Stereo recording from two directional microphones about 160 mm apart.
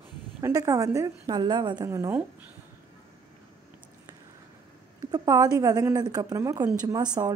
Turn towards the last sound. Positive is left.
turn(degrees=-25)  # may be behind; listen again after turning